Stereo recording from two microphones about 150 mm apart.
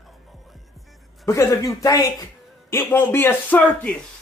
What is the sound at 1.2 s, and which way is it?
Speech, 20° left (ahead or behind).